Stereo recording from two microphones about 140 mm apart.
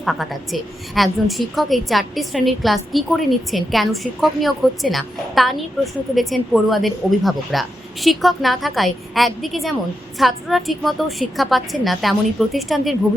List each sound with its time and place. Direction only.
0.0 s a woman's voice: centre (ahead or behind)